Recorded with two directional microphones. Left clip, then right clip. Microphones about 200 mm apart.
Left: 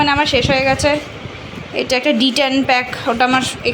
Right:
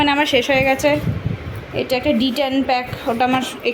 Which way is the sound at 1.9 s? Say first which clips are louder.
Left 4 dB; 5° right (ahead or behind).